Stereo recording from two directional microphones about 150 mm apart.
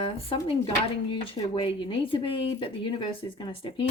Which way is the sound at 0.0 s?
40° left (ahead or behind).